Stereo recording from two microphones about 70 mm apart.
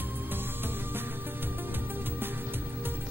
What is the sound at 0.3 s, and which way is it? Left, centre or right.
Music, right.